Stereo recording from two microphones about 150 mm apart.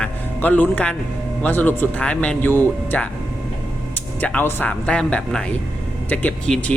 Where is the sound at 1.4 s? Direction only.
10° left (ahead or behind).